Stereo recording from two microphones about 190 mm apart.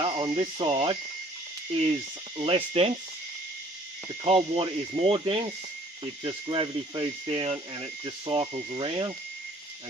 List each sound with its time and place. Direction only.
0.0 s speech: 25° right (ahead or behind)
2.4 s speech: 30° right (ahead or behind)
4.2 s speech: 30° right (ahead or behind)